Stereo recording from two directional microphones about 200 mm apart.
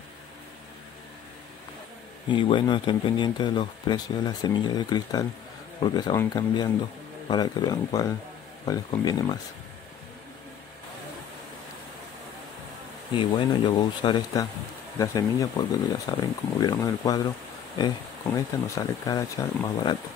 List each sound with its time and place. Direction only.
2.2 s speech: 25° left (ahead or behind)
13.1 s speech: 25° left (ahead or behind)